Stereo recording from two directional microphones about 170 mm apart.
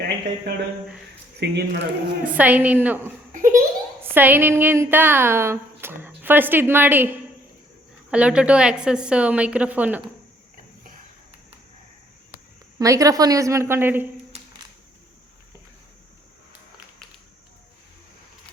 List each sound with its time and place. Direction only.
0.5 s speech: 75° right (ahead or behind)
2.2 s speech: 10° right (ahead or behind)
3.3 s a sound: 50° right (ahead or behind)
4.0 s speech: 10° right (ahead or behind)
12.8 s a woman's voice: 20° right (ahead or behind)